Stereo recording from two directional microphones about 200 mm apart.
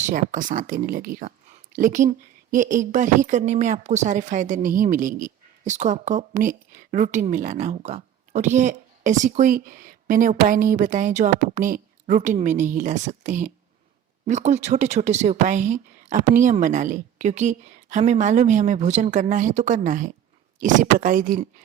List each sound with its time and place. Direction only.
0.0 s a woman's voice: 40° right (ahead or behind)